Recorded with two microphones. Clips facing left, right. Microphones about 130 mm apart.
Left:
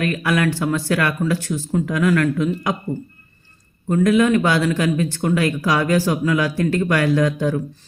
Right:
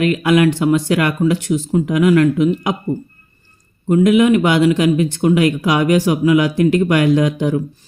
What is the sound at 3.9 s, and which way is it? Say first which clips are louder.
Speech: right 4 dB; 20° right (ahead or behind).